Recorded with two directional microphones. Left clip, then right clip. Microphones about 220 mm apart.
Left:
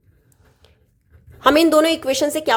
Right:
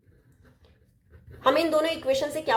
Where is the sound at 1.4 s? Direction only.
45° left (ahead or behind).